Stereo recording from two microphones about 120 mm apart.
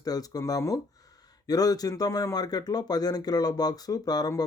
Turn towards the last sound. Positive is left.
turn(degrees=30)  # may be behind; listen again after turning